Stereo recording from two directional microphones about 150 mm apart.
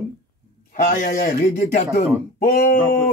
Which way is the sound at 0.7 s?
60° left (ahead or behind).